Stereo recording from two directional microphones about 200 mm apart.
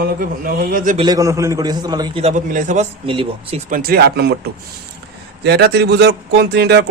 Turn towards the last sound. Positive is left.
turn(degrees=-55)  # may be behind; listen again after turning